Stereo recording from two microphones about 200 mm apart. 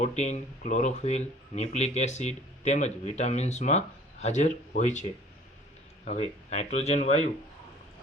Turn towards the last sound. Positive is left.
turn(degrees=35)  # may be behind; listen again after turning